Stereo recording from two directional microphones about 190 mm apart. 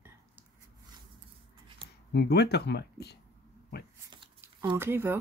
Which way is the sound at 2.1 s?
60° left (ahead or behind).